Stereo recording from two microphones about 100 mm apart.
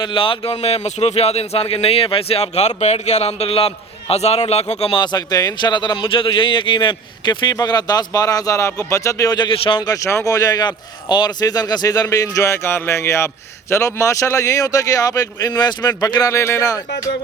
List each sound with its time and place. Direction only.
0.0 s speech: 55° left (ahead or behind); by 4.9 s 90° left
4.9 s a man's voice: 40° left (ahead or behind); by 9.8 s 60° left (ahead or behind)
9.8 s speech: 35° left (ahead or behind)
16.3 s speech: 30° left (ahead or behind)